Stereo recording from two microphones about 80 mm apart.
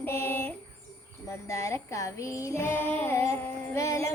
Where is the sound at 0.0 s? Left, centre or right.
Left.